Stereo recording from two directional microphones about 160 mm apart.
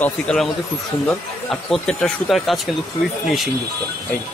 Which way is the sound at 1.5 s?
5° left (ahead or behind).